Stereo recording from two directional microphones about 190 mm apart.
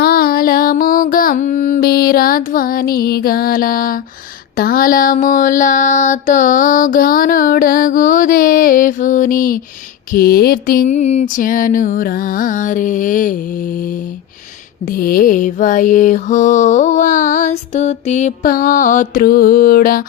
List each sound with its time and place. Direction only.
0.0 s mantra: 50° left (ahead or behind)